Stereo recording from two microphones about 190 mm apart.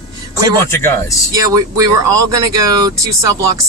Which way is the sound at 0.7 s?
15° left (ahead or behind).